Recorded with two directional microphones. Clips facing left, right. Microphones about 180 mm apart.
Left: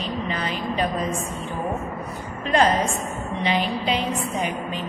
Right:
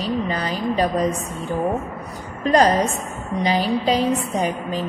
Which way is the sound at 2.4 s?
40° right (ahead or behind).